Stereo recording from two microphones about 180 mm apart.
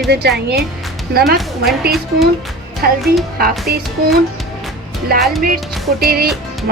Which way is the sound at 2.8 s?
55° right (ahead or behind).